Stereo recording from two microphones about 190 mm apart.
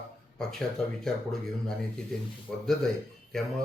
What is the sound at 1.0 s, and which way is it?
Speech, 5° left (ahead or behind).